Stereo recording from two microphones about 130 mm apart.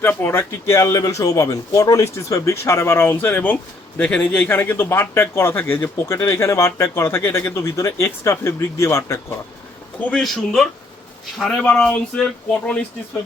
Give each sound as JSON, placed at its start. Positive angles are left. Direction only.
{"t": 0.0, "sound": "a man's voice", "side_deg": 15}
{"t": 10.0, "sound": "speech", "side_deg": 5}